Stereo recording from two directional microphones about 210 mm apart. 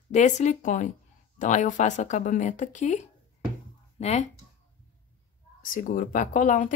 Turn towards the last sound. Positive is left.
turn(degrees=35)  # may be behind; listen again after turning